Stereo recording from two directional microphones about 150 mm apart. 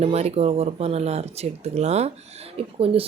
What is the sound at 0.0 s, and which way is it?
Speech, 45° right (ahead or behind).